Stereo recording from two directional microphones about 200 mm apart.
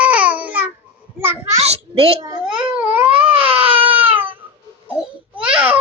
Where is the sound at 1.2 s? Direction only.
10° right (ahead or behind).